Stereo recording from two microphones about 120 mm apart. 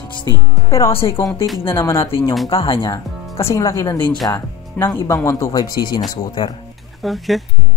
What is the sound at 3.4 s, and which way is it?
Speech, 25° left (ahead or behind).